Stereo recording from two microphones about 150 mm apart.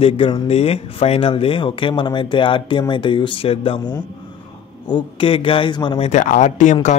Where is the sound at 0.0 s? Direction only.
40° left (ahead or behind).